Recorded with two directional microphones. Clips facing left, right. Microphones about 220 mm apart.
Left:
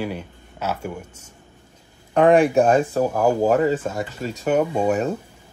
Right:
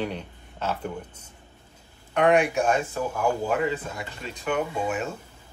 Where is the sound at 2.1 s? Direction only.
35° left (ahead or behind).